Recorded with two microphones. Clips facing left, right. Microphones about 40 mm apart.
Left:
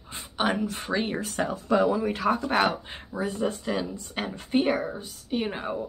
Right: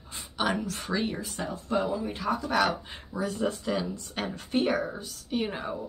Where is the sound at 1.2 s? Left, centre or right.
Left.